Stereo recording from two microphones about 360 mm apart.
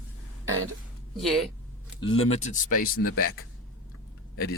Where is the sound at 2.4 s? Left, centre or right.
Left.